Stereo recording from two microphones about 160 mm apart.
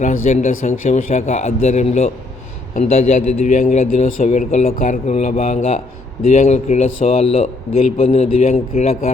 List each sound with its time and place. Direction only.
0.0 s a man's voice: 50° left (ahead or behind)